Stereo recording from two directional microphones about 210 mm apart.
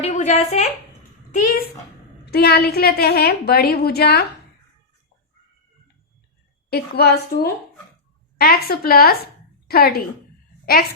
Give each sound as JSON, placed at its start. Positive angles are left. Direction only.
{"t": 0.0, "sound": "a woman's voice", "side_deg": 35}
{"t": 2.2, "sound": "a woman's voice", "side_deg": 50}
{"t": 6.7, "sound": "a woman's voice", "side_deg": 50}